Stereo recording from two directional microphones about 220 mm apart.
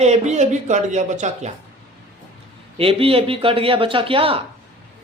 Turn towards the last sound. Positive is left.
turn(degrees=-25)  # may be behind; listen again after turning